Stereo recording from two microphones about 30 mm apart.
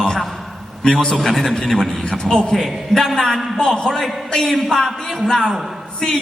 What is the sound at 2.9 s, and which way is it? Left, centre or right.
Speech, centre.